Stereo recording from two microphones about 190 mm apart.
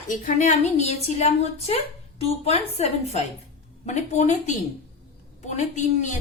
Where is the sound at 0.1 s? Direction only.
40° left (ahead or behind).